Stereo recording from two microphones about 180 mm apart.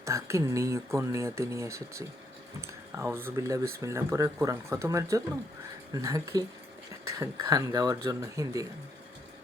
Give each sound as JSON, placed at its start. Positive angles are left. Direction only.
{"t": 0.0, "sound": "speech", "side_deg": -15}